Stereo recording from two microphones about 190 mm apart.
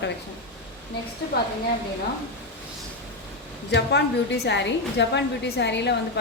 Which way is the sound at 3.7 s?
65° left (ahead or behind).